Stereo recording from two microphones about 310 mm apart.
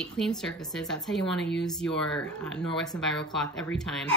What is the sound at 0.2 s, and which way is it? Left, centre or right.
A woman's voice, centre.